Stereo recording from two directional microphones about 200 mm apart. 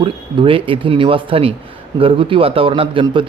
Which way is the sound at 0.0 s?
25° right (ahead or behind).